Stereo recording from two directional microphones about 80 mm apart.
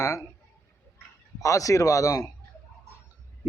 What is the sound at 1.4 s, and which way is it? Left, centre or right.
Speech, left.